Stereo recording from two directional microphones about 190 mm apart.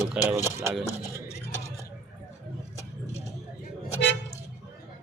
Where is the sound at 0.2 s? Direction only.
5° right (ahead or behind).